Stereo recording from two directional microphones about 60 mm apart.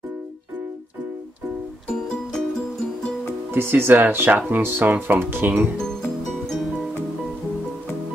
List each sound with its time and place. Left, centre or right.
3.5 s speech: right